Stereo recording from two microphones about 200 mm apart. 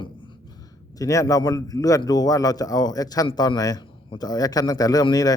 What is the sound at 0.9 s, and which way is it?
A man's voice, 15° left (ahead or behind).